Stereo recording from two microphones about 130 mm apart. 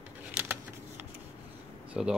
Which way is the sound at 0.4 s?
15° right (ahead or behind).